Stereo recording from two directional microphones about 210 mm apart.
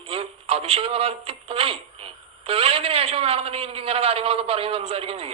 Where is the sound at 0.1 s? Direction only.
25° right (ahead or behind).